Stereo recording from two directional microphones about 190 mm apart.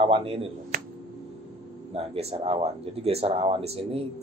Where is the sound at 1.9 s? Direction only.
30° right (ahead or behind).